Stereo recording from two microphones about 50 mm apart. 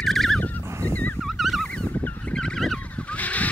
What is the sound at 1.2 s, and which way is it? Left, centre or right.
Fowl, centre.